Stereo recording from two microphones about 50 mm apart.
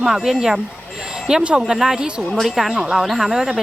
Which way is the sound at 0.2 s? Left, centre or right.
Centre.